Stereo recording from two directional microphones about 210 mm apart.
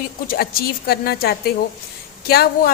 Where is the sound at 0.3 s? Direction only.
45° left (ahead or behind).